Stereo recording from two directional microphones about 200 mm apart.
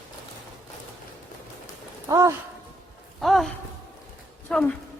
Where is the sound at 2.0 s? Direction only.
15° right (ahead or behind).